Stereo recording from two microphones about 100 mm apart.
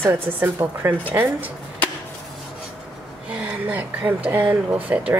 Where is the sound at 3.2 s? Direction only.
15° right (ahead or behind).